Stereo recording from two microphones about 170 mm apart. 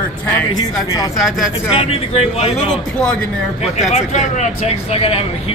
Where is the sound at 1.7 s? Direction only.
35° left (ahead or behind).